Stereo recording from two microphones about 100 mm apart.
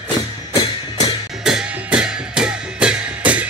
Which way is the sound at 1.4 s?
5° right (ahead or behind).